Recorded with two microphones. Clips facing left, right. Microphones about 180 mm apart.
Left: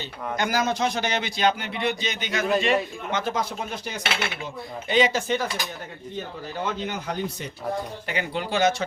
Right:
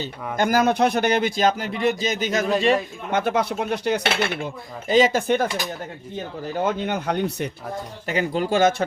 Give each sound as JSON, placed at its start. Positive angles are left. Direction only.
{"t": 0.0, "sound": "speech", "side_deg": -50}
{"t": 3.1, "sound": "speech", "side_deg": -60}
{"t": 4.9, "sound": "speech", "side_deg": -45}
{"t": 6.6, "sound": "speech", "side_deg": -55}
{"t": 8.0, "sound": "speech", "side_deg": -40}